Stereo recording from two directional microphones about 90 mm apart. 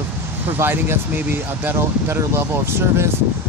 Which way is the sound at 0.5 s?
25° right (ahead or behind).